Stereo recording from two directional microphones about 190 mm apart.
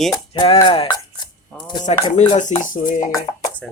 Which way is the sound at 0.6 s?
25° left (ahead or behind).